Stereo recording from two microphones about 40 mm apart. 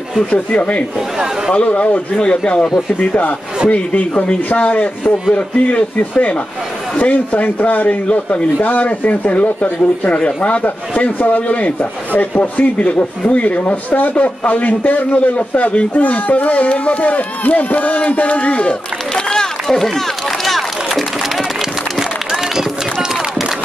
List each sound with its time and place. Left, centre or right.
0.6 s a man's voice: left
2.1 s a man's voice: left
19.1 s a sound: centre